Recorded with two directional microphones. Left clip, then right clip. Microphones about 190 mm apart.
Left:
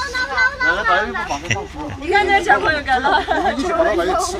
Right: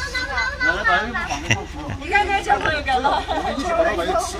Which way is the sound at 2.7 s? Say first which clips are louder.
Left 3 dB; 20° left (ahead or behind).